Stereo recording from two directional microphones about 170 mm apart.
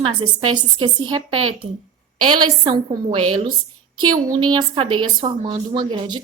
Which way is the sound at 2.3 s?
25° right (ahead or behind).